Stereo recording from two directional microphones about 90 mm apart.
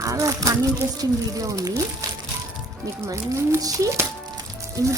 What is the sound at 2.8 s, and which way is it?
Speech, 35° right (ahead or behind).